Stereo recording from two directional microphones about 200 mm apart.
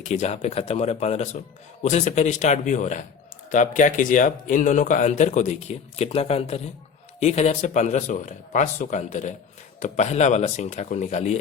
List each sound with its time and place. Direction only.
0.0 s speech: 35° left (ahead or behind)